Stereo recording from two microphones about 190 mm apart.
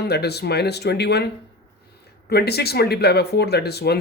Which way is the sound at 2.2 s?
55° left (ahead or behind).